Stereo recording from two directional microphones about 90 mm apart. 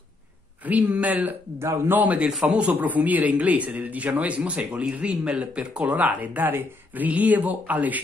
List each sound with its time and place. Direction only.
0.7 s speech: 15° right (ahead or behind)
1.6 s a man's voice: 30° right (ahead or behind)
2.0 s speech: 15° right (ahead or behind)